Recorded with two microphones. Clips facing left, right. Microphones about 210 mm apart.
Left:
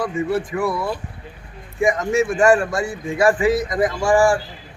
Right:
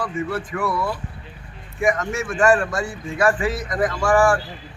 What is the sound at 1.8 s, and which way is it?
Speech, 10° left (ahead or behind).